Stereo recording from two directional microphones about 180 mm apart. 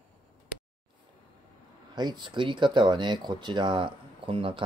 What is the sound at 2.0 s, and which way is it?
Speech, 25° right (ahead or behind).